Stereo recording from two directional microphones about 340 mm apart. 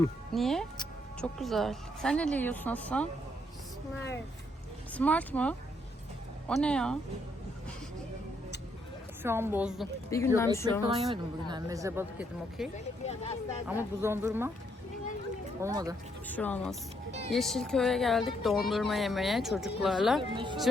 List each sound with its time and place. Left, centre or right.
0.0 s speech: centre
4.9 s speech: centre
9.2 s a woman's voice: centre
10.1 s speech: centre
10.8 s a woman's voice: centre
12.7 s speech: centre
14.0 s a woman's voice: centre
15.6 s a woman's voice: centre
16.2 s speech: centre
20.3 s a woman's voice: centre